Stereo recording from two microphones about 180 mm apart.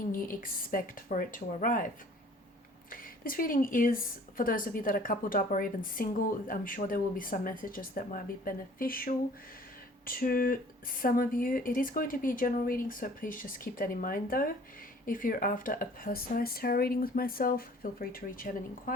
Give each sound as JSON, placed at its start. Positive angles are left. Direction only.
{"t": 0.0, "sound": "a woman's voice", "side_deg": 50}
{"t": 2.9, "sound": "a woman's voice", "side_deg": 50}